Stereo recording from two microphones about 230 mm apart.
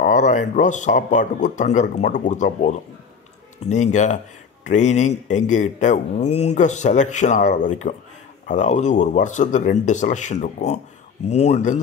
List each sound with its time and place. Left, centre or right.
0.0 s speech: left